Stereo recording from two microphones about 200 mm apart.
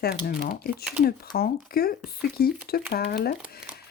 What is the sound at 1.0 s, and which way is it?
Speech, 50° left (ahead or behind).